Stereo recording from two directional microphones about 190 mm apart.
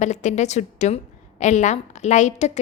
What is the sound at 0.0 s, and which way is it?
A woman's voice, 40° left (ahead or behind).